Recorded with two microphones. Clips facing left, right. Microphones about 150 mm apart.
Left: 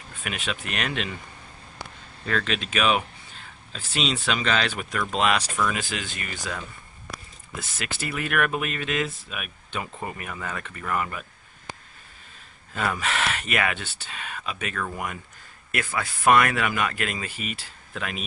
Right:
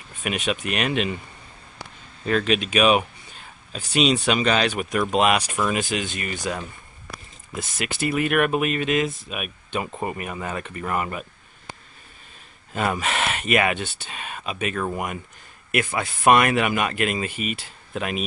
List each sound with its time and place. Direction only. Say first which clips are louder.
0.2 s speech: right 6 dB; 20° right (ahead or behind)
2.2 s speech: right 6 dB; 15° right (ahead or behind)
7.7 s speech: right 8 dB; 15° right (ahead or behind)
12.7 s speech: right 3 dB; 20° right (ahead or behind)